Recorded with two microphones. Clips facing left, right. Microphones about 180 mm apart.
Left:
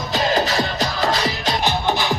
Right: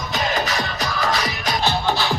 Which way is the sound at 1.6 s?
15° left (ahead or behind).